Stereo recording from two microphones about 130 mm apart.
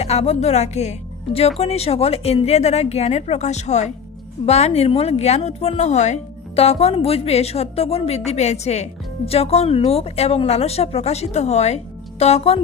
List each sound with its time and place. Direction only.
0.0 s a woman's voice: 50° left (ahead or behind)